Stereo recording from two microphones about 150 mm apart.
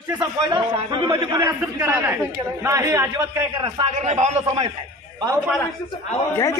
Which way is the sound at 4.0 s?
50° right (ahead or behind).